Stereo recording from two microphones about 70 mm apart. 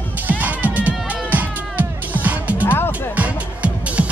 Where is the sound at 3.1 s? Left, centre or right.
Right.